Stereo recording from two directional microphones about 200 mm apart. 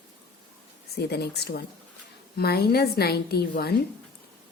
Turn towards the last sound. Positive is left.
turn(degrees=50)  # may be behind; listen again after turning